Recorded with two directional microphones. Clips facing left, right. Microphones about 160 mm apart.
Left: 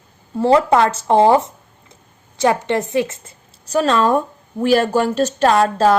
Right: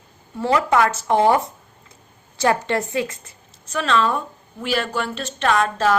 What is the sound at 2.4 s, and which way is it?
Speech, 20° left (ahead or behind).